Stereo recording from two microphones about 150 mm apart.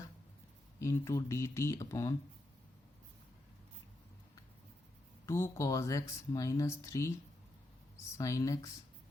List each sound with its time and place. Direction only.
0.8 s speech: 20° left (ahead or behind)
5.2 s speech: 20° left (ahead or behind)